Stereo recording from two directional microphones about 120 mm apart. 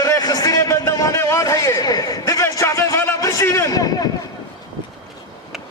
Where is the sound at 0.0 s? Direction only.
30° left (ahead or behind).